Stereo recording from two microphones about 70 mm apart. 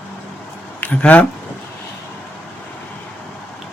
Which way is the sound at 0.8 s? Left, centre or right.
Left.